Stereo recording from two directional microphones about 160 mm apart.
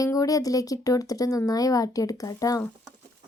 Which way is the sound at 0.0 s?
20° left (ahead or behind).